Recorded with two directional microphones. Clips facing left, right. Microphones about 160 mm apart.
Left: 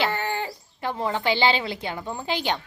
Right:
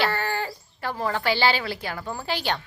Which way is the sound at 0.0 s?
20° left (ahead or behind).